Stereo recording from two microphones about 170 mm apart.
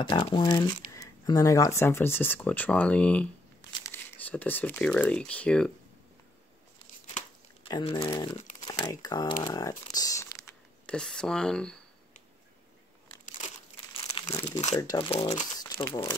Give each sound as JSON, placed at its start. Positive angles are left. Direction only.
{"t": 0.0, "sound": "speech", "side_deg": 25}
{"t": 6.8, "sound": "tearing", "side_deg": 40}
{"t": 7.7, "sound": "speech", "side_deg": 25}
{"t": 10.9, "sound": "speech", "side_deg": 5}
{"t": 14.2, "sound": "speech", "side_deg": 20}
{"t": 15.1, "sound": "speech", "side_deg": 40}
{"t": 15.6, "sound": "speech", "side_deg": 25}